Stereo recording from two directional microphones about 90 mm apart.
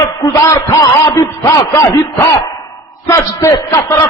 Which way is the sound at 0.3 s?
40° left (ahead or behind).